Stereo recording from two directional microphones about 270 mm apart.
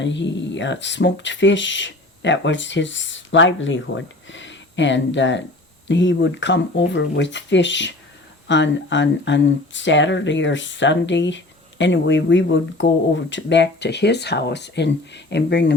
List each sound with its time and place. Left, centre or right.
0.0 s speech: left